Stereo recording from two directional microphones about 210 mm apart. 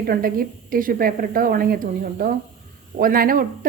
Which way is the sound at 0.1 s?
45° right (ahead or behind).